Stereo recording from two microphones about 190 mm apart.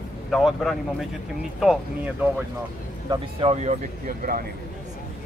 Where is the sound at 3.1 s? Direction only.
30° right (ahead or behind).